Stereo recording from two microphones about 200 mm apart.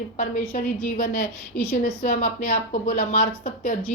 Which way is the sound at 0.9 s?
40° left (ahead or behind).